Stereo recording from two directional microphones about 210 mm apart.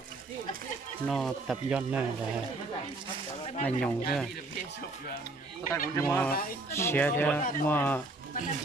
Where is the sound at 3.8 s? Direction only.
Centre (ahead or behind).